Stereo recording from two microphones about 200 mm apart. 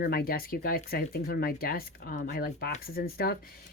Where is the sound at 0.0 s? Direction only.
50° left (ahead or behind).